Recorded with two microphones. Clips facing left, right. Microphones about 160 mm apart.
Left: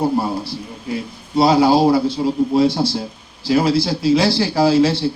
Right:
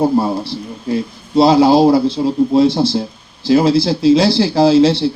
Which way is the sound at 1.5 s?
20° right (ahead or behind).